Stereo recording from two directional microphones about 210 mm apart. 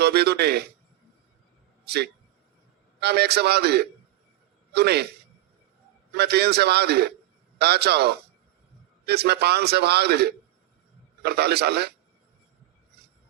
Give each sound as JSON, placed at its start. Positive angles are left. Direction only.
{"t": 0.0, "sound": "a man's voice", "side_deg": -50}
{"t": 1.8, "sound": "a man's voice", "side_deg": -50}
{"t": 6.1, "sound": "a man's voice", "side_deg": -50}